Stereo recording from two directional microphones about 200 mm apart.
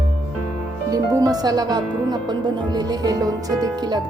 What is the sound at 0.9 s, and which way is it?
Music, 15° right (ahead or behind).